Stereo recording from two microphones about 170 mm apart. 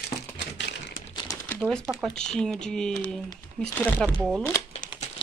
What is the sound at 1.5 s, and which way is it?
Speech, 5° left (ahead or behind).